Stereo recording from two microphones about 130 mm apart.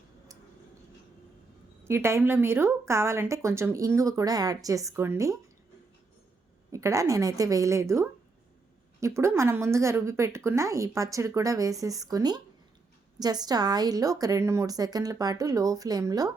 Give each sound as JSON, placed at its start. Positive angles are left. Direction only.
{"t": 1.8, "sound": "a woman's voice", "side_deg": -20}
{"t": 6.7, "sound": "a woman's voice", "side_deg": -25}